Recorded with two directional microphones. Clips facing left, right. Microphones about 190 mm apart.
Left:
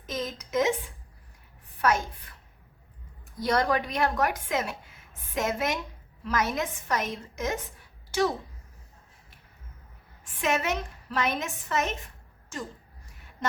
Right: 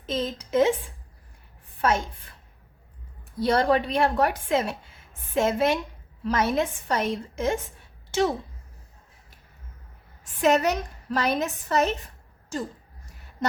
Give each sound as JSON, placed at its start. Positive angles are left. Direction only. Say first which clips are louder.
{"t": 0.0, "sound": "a woman's voice", "louder": "right 5 dB", "side_deg": -30}
{"t": 1.8, "sound": "a woman's voice", "louder": "right 1 dB", "side_deg": -25}
{"t": 3.4, "sound": "a woman's voice", "louder": "right 4 dB", "side_deg": -30}
{"t": 10.4, "sound": "a woman's voice", "louder": "right 6 dB", "side_deg": -40}